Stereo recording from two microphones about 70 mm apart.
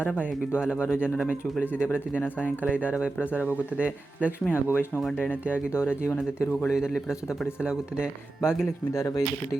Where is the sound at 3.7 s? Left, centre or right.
Centre.